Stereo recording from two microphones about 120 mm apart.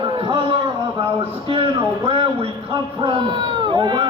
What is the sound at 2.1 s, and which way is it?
A man's voice, 50° right (ahead or behind).